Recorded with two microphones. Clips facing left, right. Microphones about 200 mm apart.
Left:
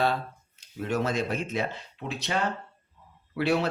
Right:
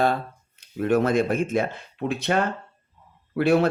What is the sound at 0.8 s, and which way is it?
Speech, 55° right (ahead or behind).